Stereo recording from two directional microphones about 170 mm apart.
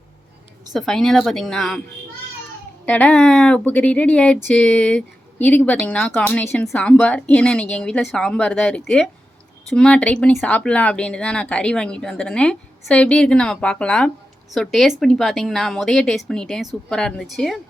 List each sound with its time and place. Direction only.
0.7 s speech: centre (ahead or behind)
2.8 s speech: 10° left (ahead or behind)